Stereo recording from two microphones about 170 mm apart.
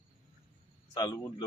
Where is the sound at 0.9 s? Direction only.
25° left (ahead or behind).